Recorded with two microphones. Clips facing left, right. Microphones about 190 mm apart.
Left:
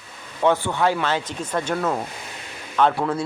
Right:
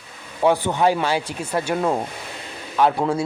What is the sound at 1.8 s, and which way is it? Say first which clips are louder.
Speech: right 3 dB; 20° right (ahead or behind).